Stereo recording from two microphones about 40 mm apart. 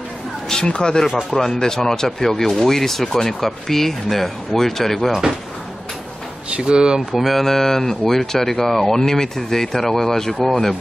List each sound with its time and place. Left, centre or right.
0.5 s speech: left
6.5 s speech: right
7.1 s speech: centre